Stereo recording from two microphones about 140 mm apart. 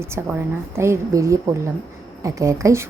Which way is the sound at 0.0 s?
20° right (ahead or behind).